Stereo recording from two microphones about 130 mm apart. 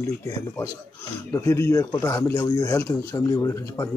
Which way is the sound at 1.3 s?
20° left (ahead or behind).